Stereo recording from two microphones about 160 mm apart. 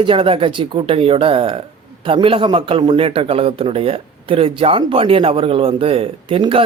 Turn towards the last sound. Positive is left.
turn(degrees=-35)  # may be behind; listen again after turning